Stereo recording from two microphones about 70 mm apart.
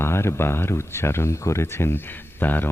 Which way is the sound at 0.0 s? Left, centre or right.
Left.